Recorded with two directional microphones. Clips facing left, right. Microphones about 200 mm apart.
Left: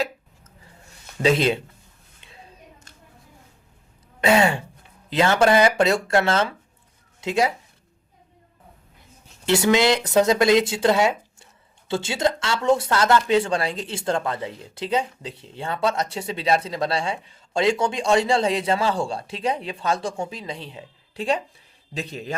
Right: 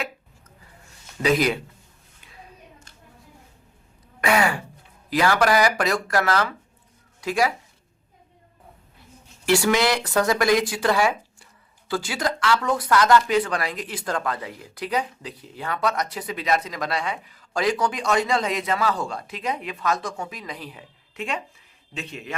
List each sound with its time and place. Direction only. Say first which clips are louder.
1.2 s speech: left 1 dB; 25° left (ahead or behind)
4.2 s throat clearing: left 3 dB; 25° left (ahead or behind)
5.0 s speech: left 2 dB; 25° left (ahead or behind)
9.5 s a man's voice: left 2 dB; 20° left (ahead or behind)